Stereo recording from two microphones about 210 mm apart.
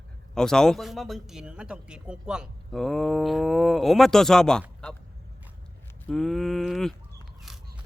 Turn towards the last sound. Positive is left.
turn(degrees=0)  # may be behind; listen again after turning